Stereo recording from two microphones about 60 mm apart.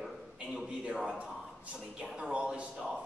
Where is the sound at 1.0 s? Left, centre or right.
Centre.